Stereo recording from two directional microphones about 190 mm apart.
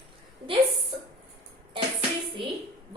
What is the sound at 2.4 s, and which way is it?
Speech, 25° right (ahead or behind).